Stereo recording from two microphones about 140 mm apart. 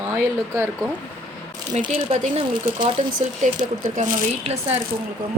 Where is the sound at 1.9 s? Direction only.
50° right (ahead or behind).